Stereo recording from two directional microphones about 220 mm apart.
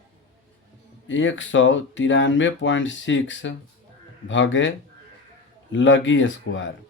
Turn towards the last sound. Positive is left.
turn(degrees=60)  # may be behind; listen again after turning